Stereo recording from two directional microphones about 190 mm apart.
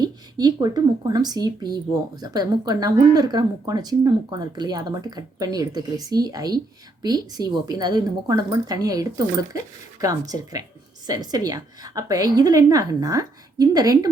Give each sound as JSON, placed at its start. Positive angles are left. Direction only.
{"t": 0.0, "sound": "speech", "side_deg": -20}